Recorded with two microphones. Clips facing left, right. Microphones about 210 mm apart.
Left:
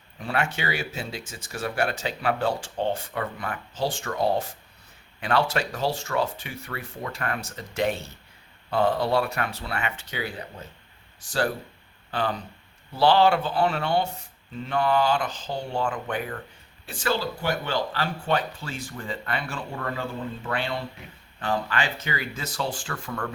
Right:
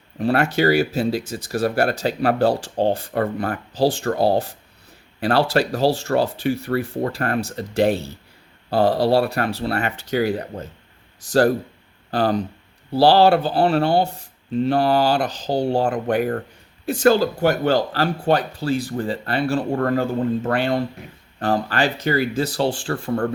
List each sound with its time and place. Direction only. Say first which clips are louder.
0.2 s speech: right 10 dB; 40° right (ahead or behind)
19.7 s speech: right 11 dB; 50° right (ahead or behind); by 23.3 s 35° right (ahead or behind)